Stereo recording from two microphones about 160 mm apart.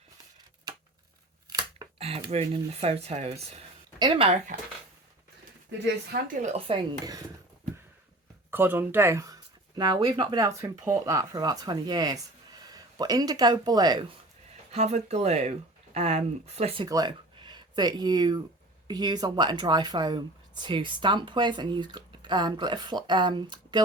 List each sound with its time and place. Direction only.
1.5 s scissors: 25° right (ahead or behind)
2.0 s speech: 40° right (ahead or behind)
3.9 s speech: 30° right (ahead or behind)
6.2 s speech: 45° right (ahead or behind); by 7.2 s 30° right (ahead or behind)
8.4 s speech: 15° right (ahead or behind)
14.7 s speech: 45° right (ahead or behind)
16.8 s speech: 25° right (ahead or behind)